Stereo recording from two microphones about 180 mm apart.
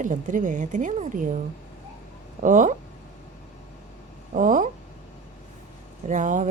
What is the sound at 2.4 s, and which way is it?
Speech, 45° right (ahead or behind).